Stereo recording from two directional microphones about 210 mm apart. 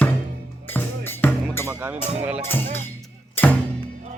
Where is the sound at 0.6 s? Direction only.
10° left (ahead or behind).